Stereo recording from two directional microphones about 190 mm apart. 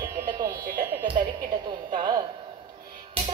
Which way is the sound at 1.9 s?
25° right (ahead or behind).